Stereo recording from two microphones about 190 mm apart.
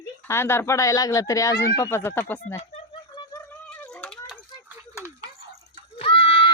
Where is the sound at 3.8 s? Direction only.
5° left (ahead or behind).